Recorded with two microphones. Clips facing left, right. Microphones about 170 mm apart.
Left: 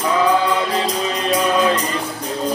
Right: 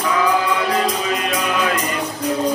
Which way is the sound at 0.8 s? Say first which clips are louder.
Right 1 dB; 30° left (ahead or behind).